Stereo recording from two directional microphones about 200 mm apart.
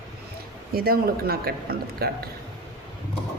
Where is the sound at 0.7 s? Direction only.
50° right (ahead or behind).